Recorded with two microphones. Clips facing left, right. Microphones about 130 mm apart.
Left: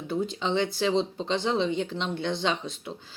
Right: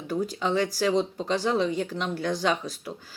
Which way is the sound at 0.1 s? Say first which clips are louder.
Right 1 dB; 25° left (ahead or behind).